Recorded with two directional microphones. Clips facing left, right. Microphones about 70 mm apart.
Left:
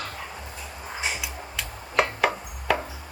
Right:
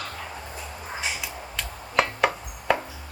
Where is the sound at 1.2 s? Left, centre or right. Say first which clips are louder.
Even; centre.